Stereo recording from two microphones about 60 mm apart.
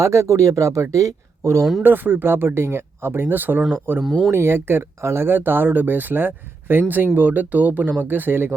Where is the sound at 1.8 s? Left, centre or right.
Right.